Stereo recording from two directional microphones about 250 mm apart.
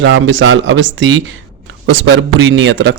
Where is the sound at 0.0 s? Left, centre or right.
Right.